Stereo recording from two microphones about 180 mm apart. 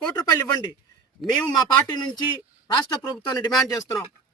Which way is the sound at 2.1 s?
25° left (ahead or behind).